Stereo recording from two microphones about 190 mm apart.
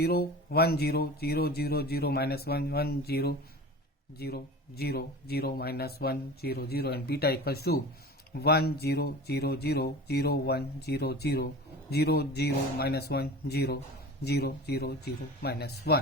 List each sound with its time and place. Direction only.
0.0 s speech: 55° left (ahead or behind)